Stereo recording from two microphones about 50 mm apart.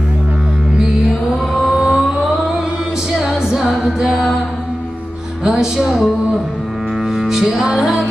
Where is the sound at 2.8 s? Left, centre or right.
Centre.